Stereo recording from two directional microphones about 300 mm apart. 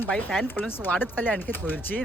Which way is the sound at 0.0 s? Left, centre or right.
Centre.